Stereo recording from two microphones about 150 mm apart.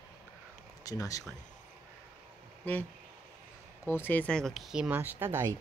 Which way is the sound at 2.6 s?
10° left (ahead or behind).